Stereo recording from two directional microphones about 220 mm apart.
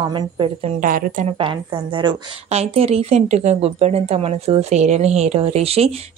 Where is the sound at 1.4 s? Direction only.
20° right (ahead or behind).